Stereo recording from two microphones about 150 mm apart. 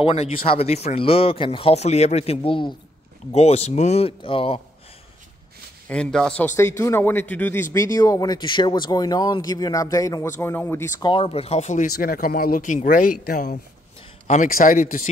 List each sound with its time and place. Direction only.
0.0 s speech: 40° left (ahead or behind)
5.9 s speech: 5° left (ahead or behind)
6.4 s speech: 20° left (ahead or behind)
11.0 s speech: 35° left (ahead or behind); by 11.9 s 50° left (ahead or behind)
11.9 s speech: 75° left (ahead or behind)
14.2 s a man's voice: 50° left (ahead or behind)
14.5 s speech: 65° left (ahead or behind)